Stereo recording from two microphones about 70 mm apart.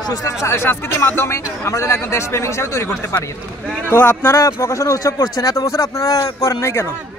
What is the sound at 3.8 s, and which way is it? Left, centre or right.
Speech, left.